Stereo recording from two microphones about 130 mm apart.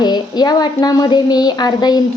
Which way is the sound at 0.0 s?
30° left (ahead or behind).